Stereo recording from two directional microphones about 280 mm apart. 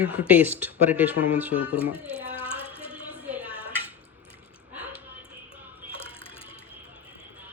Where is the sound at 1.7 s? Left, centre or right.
Centre.